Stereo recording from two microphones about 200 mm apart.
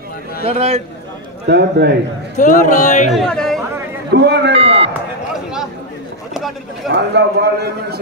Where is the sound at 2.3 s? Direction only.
40° left (ahead or behind).